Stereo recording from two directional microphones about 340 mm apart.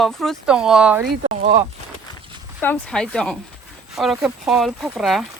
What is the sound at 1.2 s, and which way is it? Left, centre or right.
Speech, centre.